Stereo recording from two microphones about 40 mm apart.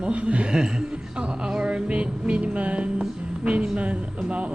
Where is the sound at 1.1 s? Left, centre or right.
Right.